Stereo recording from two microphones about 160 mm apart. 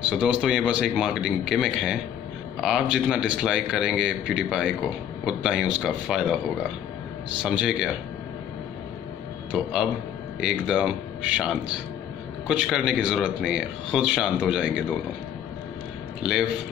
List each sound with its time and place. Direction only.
0.2 s speech: 5° right (ahead or behind)
7.4 s speech: 5° right (ahead or behind)
9.5 s speech: 5° right (ahead or behind)
16.2 s speech: 5° right (ahead or behind)